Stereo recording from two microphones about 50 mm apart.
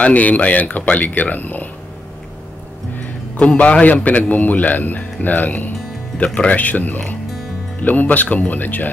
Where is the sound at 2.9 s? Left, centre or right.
Left.